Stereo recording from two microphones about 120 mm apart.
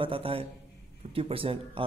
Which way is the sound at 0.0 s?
50° right (ahead or behind).